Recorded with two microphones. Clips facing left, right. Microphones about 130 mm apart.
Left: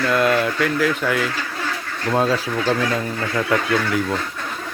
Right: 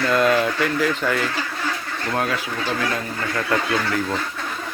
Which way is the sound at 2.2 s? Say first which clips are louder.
Left 5 dB; 35° left (ahead or behind).